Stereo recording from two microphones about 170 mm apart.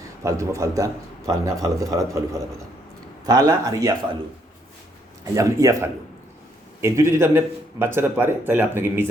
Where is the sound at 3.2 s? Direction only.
20° right (ahead or behind).